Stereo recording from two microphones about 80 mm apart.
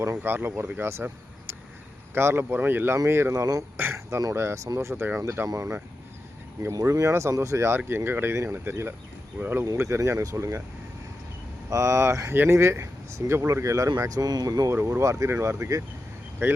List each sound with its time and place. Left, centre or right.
0.2 s speech: right
2.1 s speech: right
3.8 s a sound: right
4.2 s speech: right
5.5 s speech: right
6.8 s speech: right
9.6 s speech: right
11.7 s speech: right
14.7 s speech: right